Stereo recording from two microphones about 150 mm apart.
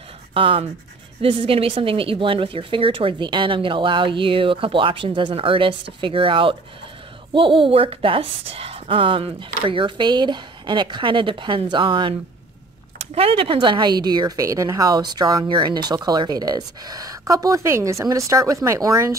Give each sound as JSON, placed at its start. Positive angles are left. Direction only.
{"t": 0.3, "sound": "a woman's voice", "side_deg": -35}